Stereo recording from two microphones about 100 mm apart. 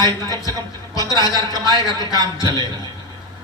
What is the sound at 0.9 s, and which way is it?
A man's voice, 40° left (ahead or behind).